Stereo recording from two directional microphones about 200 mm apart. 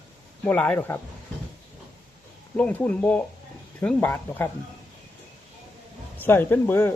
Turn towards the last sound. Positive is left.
turn(degrees=10)  # may be behind; listen again after turning